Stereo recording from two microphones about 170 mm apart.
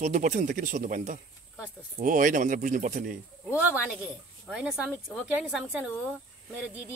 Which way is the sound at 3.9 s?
5° right (ahead or behind).